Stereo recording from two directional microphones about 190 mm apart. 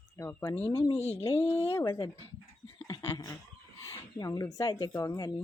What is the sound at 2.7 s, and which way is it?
Dog, 15° left (ahead or behind).